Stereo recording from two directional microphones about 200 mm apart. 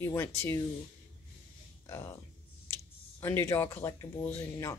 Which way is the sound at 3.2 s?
10° left (ahead or behind).